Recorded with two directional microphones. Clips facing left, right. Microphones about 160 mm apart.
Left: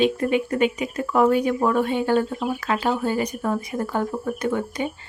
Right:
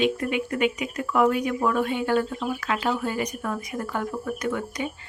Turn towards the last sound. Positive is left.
turn(degrees=30)  # may be behind; listen again after turning